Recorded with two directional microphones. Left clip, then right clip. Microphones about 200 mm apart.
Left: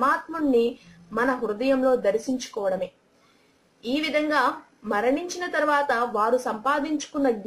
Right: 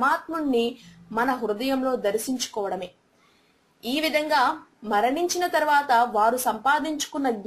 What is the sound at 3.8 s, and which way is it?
A woman's voice, 40° right (ahead or behind).